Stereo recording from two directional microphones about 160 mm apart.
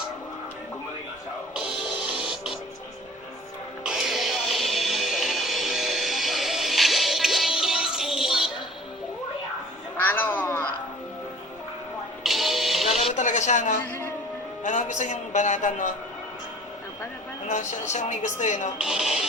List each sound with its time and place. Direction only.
1.5 s music: 5° right (ahead or behind)
3.8 s music: 5° right (ahead or behind)
10.0 s a sound: 10° left (ahead or behind)
12.2 s music: centre (ahead or behind)
13.0 s a sound: 45° left (ahead or behind)
14.6 s music: 50° left (ahead or behind)
17.5 s a woman's voice: 50° left (ahead or behind)
18.8 s speech: centre (ahead or behind)